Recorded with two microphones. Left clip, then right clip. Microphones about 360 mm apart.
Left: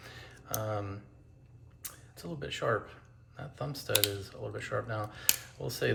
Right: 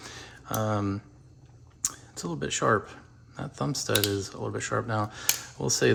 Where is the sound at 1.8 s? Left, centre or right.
Centre.